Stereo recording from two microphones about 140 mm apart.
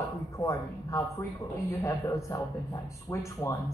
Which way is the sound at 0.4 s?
25° left (ahead or behind).